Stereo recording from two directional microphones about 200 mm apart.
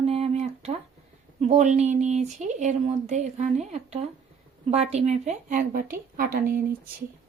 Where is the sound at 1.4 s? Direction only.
35° right (ahead or behind).